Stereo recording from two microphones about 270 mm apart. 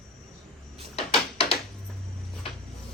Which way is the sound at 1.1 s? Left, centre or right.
Left.